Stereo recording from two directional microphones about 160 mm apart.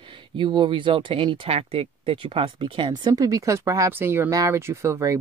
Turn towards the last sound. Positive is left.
turn(degrees=-20)  # may be behind; listen again after turning